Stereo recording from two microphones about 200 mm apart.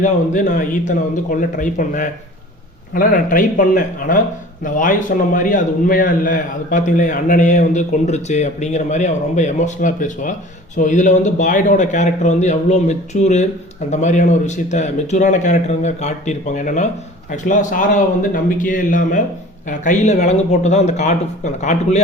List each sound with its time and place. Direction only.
0.0 s a man's voice: 40° left (ahead or behind)